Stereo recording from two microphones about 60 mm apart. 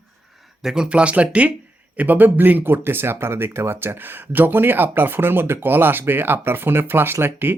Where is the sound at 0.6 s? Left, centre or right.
Centre.